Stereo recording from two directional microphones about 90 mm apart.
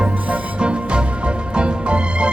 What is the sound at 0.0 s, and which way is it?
Music, 15° right (ahead or behind).